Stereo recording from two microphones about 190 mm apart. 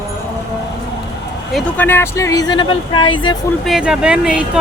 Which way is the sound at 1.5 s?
10° left (ahead or behind).